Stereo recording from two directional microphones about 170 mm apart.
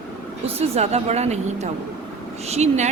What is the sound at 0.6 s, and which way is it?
A woman's voice, 40° right (ahead or behind).